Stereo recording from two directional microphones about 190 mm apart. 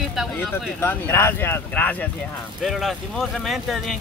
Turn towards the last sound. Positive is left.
turn(degrees=0)  # may be behind; listen again after turning